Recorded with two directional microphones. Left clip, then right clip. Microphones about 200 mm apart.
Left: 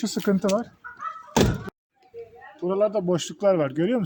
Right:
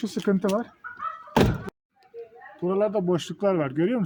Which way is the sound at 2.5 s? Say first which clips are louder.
Left 1 dB; 10° left (ahead or behind).